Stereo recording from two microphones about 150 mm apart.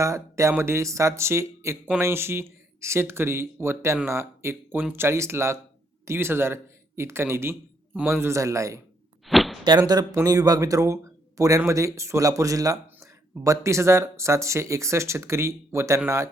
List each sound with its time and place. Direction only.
0.0 s speech: 20° right (ahead or behind)
9.2 s a sound: centre (ahead or behind)
9.6 s speech: 30° right (ahead or behind)